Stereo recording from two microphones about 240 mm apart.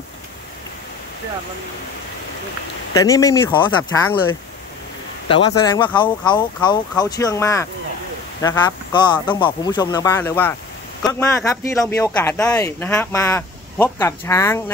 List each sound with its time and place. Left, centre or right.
2.9 s a man's voice: centre
5.6 s a man's voice: centre